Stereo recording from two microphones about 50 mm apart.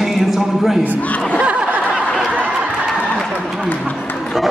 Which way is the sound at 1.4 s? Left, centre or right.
Right.